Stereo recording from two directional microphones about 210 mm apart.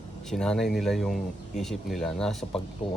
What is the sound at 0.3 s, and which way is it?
Speech, 5° left (ahead or behind).